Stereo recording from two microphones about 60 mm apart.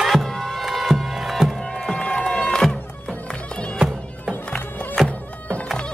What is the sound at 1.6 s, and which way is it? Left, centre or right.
Music, centre.